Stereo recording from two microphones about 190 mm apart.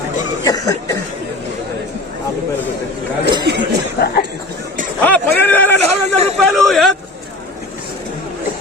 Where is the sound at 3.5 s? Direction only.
60° right (ahead or behind).